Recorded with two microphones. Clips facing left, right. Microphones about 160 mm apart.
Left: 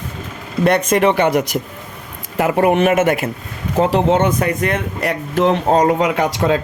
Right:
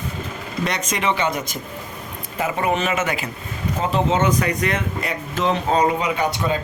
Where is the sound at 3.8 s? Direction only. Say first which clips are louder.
Left 5 dB; 65° left (ahead or behind).